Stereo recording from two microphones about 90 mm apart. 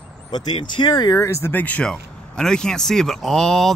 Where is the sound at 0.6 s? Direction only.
60° left (ahead or behind).